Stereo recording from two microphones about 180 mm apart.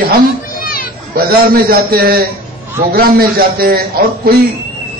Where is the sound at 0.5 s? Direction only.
50° left (ahead or behind).